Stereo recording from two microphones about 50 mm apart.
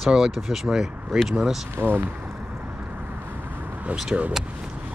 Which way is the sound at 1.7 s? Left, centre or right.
Right.